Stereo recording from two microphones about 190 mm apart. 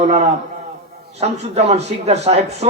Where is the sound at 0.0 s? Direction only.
35° right (ahead or behind).